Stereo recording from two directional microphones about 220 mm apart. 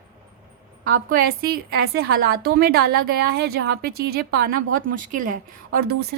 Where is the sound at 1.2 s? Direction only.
45° right (ahead or behind).